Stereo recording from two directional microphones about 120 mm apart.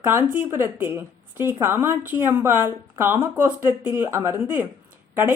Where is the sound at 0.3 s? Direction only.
15° right (ahead or behind).